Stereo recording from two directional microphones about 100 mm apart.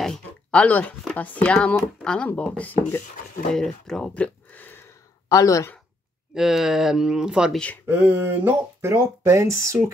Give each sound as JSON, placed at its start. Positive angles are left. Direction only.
{"t": 0.0, "sound": "a sound", "side_deg": 10}
{"t": 1.1, "sound": "speech", "side_deg": 15}
{"t": 3.5, "sound": "speech", "side_deg": 5}
{"t": 5.3, "sound": "speech", "side_deg": 35}
{"t": 6.3, "sound": "speech", "side_deg": -5}
{"t": 7.5, "sound": "speech", "side_deg": 15}
{"t": 7.8, "sound": "speech", "side_deg": -25}